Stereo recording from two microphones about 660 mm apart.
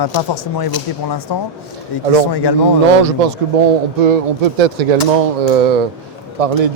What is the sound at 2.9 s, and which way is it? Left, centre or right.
A man's voice, right.